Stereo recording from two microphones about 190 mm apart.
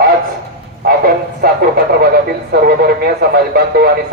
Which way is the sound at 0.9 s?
50° right (ahead or behind).